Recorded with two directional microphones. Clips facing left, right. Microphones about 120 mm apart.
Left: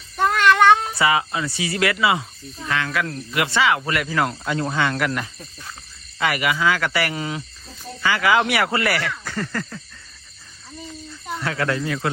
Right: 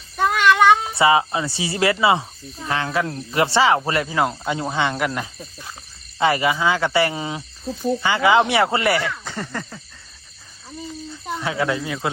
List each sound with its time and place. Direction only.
0.2 s child singing: 5° right (ahead or behind)
0.9 s speech: 25° right (ahead or behind)
6.1 s speech: 30° right (ahead or behind)
11.3 s speech: 15° right (ahead or behind)